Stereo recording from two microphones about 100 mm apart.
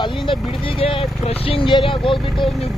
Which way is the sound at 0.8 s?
70° left (ahead or behind).